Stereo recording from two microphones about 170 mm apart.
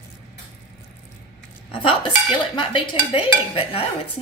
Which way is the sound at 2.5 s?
30° left (ahead or behind).